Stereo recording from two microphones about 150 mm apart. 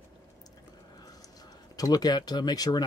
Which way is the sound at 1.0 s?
25° left (ahead or behind).